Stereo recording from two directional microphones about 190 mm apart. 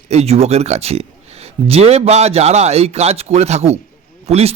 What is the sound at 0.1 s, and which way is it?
A man's voice, 35° right (ahead or behind).